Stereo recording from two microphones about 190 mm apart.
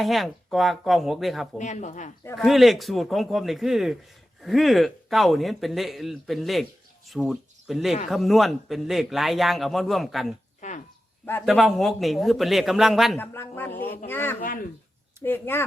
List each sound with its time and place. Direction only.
0.0 s a man's voice: centre (ahead or behind)
1.5 s speech: 40° left (ahead or behind)
2.3 s a man's voice: centre (ahead or behind)
10.6 s a sound: 40° left (ahead or behind)
11.4 s a man's voice: centre (ahead or behind)
13.1 s speech: 10° left (ahead or behind)